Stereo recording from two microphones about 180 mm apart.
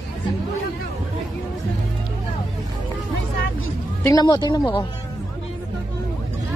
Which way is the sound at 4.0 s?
20° left (ahead or behind).